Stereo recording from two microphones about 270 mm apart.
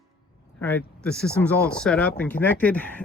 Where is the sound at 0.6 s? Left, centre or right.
Centre.